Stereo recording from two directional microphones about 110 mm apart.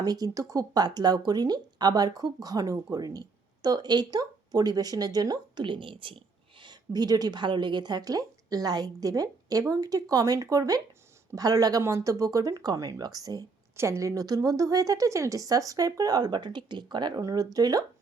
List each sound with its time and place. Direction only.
0.0 s speech: 35° right (ahead or behind)